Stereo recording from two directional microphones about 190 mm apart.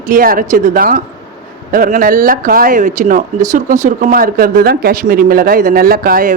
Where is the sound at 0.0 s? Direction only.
45° right (ahead or behind).